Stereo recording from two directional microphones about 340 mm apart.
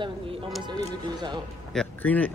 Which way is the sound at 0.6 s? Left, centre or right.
Centre.